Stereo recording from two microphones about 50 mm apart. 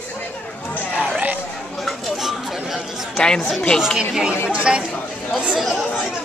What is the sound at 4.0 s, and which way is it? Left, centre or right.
Speech, centre.